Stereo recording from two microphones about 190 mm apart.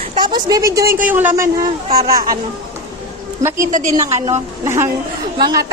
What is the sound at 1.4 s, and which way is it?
A woman's voice, 15° right (ahead or behind).